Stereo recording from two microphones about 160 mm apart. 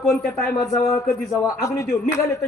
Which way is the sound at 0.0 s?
5° left (ahead or behind).